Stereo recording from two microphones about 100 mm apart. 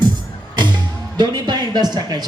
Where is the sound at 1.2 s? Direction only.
45° right (ahead or behind).